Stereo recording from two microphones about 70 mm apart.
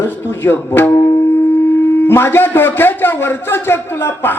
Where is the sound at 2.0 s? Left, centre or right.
Left.